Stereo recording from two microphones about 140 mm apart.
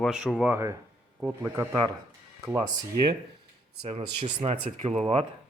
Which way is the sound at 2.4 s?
25° right (ahead or behind).